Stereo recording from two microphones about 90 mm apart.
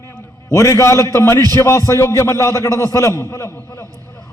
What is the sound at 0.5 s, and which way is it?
A man's voice, 35° left (ahead or behind).